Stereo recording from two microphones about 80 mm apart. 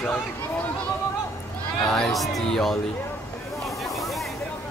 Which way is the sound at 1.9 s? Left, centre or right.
Centre.